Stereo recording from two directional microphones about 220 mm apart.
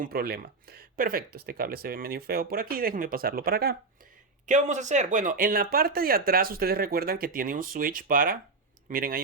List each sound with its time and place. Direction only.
0.0 s speech: 45° right (ahead or behind)
4.4 s speech: 35° right (ahead or behind)